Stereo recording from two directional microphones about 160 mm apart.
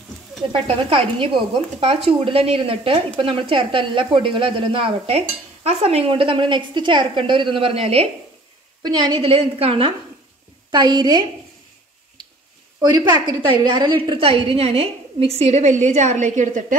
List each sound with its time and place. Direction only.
0.5 s speech: 35° right (ahead or behind)
8.8 s a woman's voice: 25° right (ahead or behind)
12.8 s a woman's voice: 25° right (ahead or behind); by 16.7 s 50° right (ahead or behind)